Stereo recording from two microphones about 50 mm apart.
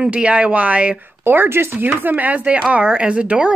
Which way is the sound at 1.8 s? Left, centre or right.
Right.